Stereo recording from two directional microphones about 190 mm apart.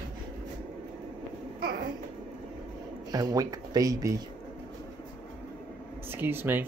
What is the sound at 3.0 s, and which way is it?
Speech, 20° right (ahead or behind).